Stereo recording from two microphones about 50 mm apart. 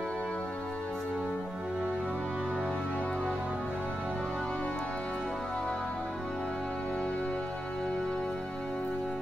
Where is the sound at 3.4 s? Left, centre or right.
Centre.